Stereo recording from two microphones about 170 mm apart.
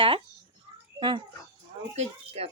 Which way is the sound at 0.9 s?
25° right (ahead or behind).